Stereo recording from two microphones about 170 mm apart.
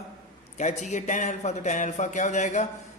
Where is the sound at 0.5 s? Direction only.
45° left (ahead or behind).